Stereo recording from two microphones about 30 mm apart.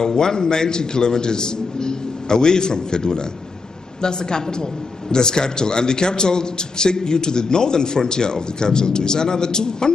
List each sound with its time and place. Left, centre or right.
0.0 s a man's voice: left